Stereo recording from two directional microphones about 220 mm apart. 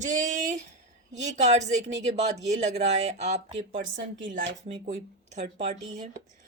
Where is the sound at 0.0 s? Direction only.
35° right (ahead or behind).